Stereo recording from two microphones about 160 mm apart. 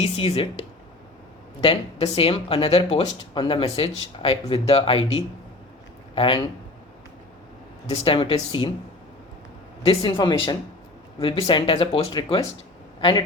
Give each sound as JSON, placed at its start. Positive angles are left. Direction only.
{"t": 0.0, "sound": "speech", "side_deg": 40}
{"t": 1.6, "sound": "speech", "side_deg": 40}
{"t": 7.9, "sound": "speech", "side_deg": 35}
{"t": 9.8, "sound": "a man's voice", "side_deg": 35}